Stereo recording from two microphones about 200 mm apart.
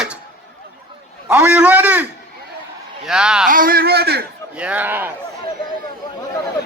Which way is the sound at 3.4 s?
45° right (ahead or behind).